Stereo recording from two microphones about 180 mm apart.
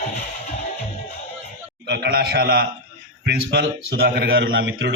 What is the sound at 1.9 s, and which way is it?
Speech, 60° right (ahead or behind).